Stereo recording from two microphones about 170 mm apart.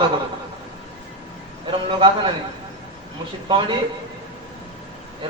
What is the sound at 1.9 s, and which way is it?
Speech, 30° right (ahead or behind).